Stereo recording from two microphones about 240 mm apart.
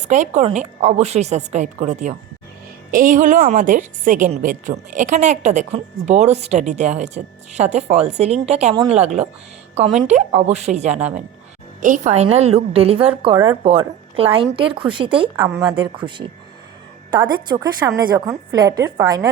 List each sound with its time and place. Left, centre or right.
0.0 s a woman's voice: right; by 15.8 s centre
17.1 s a woman's voice: centre